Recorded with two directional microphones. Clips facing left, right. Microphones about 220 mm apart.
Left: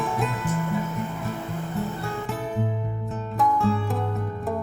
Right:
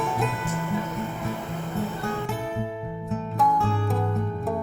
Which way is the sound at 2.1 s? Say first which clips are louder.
Right 1 dB; centre (ahead or behind).